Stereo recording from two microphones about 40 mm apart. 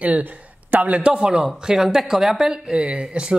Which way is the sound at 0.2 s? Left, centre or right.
Right.